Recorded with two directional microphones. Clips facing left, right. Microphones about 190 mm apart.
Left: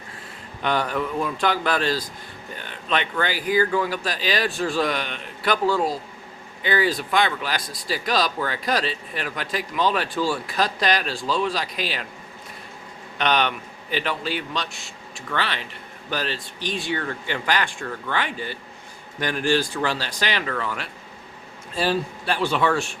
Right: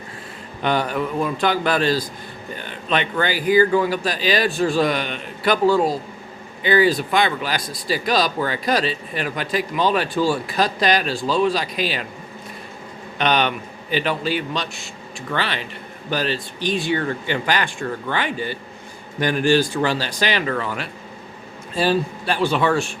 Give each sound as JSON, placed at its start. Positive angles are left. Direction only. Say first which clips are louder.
{"t": 0.6, "sound": "speech", "louder": "right 3 dB", "side_deg": -15}
{"t": 3.7, "sound": "speech", "louder": "right 5 dB", "side_deg": -15}
{"t": 4.0, "sound": "speech", "louder": "right 4 dB", "side_deg": -5}
{"t": 13.1, "sound": "speech", "louder": "right 3 dB", "side_deg": -10}
{"t": 20.5, "sound": "speech", "louder": "right 4 dB", "side_deg": -20}
{"t": 21.8, "sound": "speech", "louder": "right 3 dB", "side_deg": -20}